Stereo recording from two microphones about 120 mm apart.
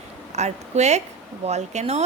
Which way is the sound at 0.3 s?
70° right (ahead or behind).